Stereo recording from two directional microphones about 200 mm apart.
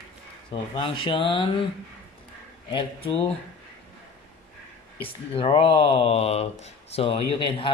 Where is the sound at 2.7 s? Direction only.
25° left (ahead or behind).